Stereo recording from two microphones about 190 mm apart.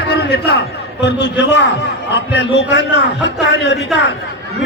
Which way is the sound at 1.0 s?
65° left (ahead or behind).